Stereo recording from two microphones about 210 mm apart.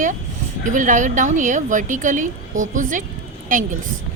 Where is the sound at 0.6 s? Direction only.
40° right (ahead or behind).